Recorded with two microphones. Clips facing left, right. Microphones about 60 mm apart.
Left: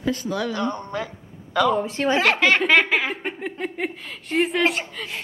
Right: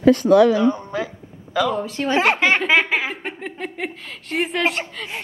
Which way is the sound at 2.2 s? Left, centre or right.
Right.